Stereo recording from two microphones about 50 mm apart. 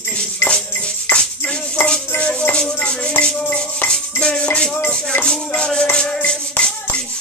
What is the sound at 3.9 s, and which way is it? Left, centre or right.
Music, centre.